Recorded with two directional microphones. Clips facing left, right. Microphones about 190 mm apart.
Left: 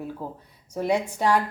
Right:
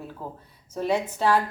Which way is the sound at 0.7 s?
15° left (ahead or behind).